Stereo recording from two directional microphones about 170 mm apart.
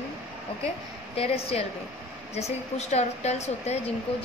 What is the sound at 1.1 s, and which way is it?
A woman's voice, 35° left (ahead or behind).